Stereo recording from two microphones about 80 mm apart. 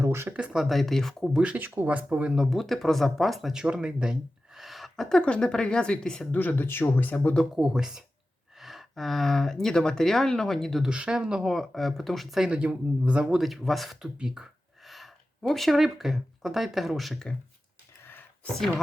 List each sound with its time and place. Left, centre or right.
0.0 s a sound: right
0.3 s speech: centre
0.6 s speech: centre
1.3 s speech: centre
6.4 s speech: left
7.5 s speech: centre
10.8 s speech: centre
12.5 s speech: centre
18.0 s a sound: left
18.5 s chopping: centre